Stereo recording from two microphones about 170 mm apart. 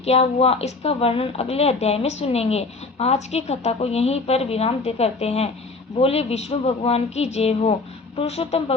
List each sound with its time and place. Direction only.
0.0 s a woman's voice: 35° left (ahead or behind)